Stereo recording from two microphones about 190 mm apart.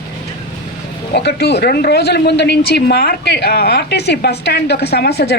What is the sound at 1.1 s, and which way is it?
Speech, 60° left (ahead or behind).